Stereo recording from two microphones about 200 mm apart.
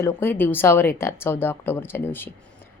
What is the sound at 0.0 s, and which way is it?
A woman's voice, 10° left (ahead or behind).